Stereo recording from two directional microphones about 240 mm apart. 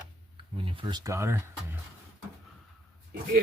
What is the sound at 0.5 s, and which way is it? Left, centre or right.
Speech, right.